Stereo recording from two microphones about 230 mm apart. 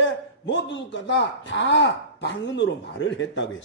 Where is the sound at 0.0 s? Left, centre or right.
Left.